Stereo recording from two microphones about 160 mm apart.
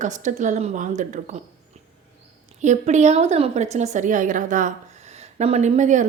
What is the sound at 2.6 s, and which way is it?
Speech, 50° right (ahead or behind).